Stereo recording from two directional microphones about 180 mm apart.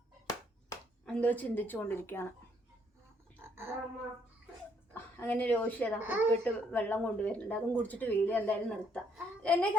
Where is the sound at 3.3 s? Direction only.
10° left (ahead or behind).